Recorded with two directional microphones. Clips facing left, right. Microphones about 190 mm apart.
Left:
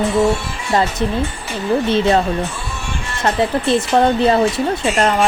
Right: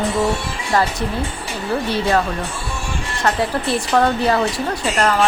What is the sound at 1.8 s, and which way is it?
Speech, 25° left (ahead or behind).